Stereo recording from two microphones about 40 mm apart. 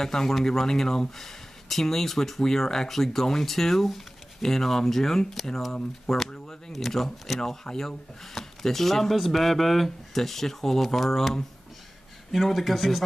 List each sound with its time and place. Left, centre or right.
0.0 s speech: centre
6.3 s a sound: left
6.7 s speech: centre
7.3 s speech: centre
12.5 s speech: centre